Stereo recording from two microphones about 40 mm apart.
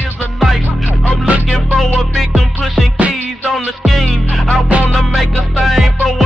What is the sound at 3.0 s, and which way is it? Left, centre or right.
Music, right.